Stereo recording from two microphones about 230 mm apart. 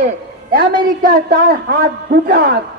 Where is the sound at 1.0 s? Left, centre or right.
Right.